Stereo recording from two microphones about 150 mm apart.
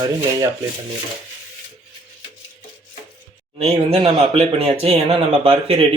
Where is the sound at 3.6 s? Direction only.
40° right (ahead or behind).